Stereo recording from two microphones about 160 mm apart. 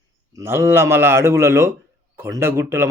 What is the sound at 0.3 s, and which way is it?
A man's voice, 15° right (ahead or behind).